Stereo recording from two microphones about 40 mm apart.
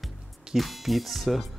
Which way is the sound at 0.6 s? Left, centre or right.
Centre.